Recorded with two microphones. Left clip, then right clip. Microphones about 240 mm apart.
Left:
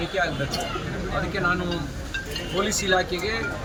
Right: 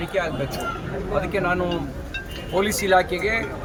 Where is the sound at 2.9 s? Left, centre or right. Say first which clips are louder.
Right 6 dB; centre.